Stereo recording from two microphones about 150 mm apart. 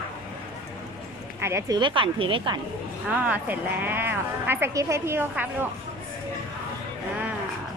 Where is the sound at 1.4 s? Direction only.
20° right (ahead or behind).